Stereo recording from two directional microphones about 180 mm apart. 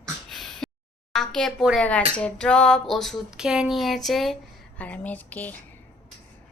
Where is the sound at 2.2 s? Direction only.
5° left (ahead or behind).